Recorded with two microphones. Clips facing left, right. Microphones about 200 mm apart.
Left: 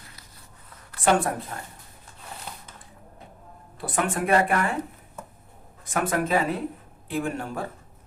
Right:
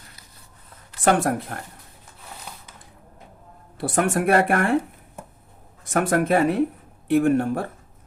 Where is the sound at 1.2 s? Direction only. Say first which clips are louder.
Right 5 dB; 70° right (ahead or behind).